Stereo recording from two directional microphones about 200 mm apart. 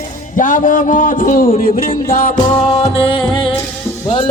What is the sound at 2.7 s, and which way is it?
Music, 25° left (ahead or behind).